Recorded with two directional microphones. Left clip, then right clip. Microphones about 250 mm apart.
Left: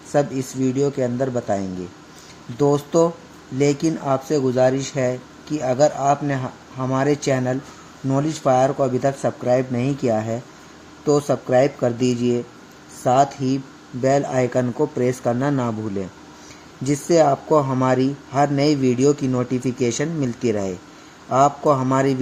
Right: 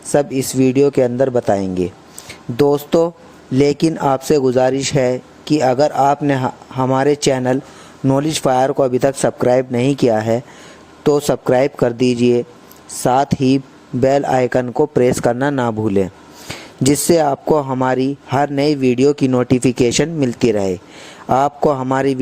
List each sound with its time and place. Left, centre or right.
0.1 s speech: right